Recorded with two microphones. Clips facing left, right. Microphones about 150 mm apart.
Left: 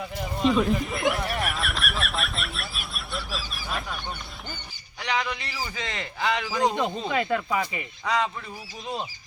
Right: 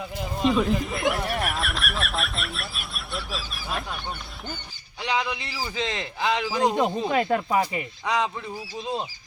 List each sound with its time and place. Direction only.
0.4 s a sound: centre (ahead or behind)
4.9 s speech: 20° right (ahead or behind)
7.1 s speech: 45° right (ahead or behind)
8.0 s speech: 15° right (ahead or behind)